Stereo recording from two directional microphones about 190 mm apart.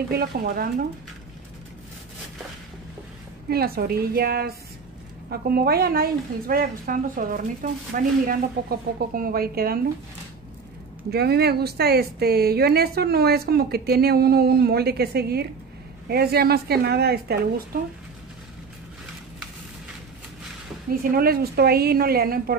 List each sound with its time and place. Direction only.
0.1 s a woman's voice: 55° right (ahead or behind)
3.4 s a woman's voice: 55° right (ahead or behind)
11.1 s a woman's voice: 55° right (ahead or behind)
21.1 s a woman's voice: 55° right (ahead or behind)